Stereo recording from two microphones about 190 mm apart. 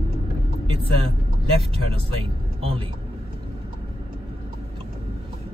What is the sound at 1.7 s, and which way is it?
Speech, 30° right (ahead or behind).